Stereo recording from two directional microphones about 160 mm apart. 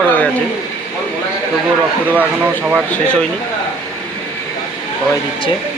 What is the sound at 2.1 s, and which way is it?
Speech, 10° right (ahead or behind).